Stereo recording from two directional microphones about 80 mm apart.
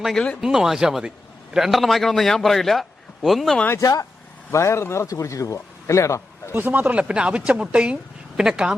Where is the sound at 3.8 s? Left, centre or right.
Left.